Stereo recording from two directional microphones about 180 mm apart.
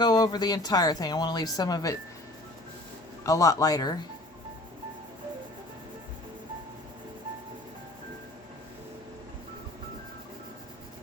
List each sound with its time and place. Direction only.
0.0 s speech: 25° left (ahead or behind)
3.2 s speech: 20° left (ahead or behind)